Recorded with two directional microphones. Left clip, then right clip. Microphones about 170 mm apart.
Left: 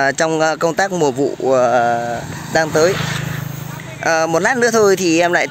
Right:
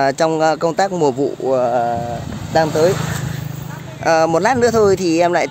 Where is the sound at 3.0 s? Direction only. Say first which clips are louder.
Left 3 dB; 30° right (ahead or behind).